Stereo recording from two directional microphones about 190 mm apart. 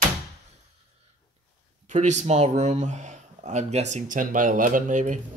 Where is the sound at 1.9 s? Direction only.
40° right (ahead or behind).